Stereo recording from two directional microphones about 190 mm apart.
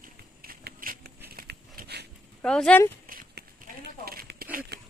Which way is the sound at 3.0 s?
50° right (ahead or behind).